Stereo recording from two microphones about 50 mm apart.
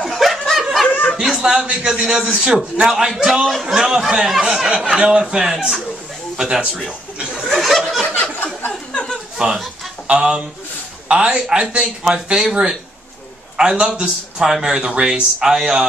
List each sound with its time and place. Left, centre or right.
0.0 s snicker: centre
0.8 s chuckle: left
1.2 s a man's voice: centre
7.5 s chuckle: centre
8.6 s chuckle: centre
9.4 s speech: centre
13.6 s speech: centre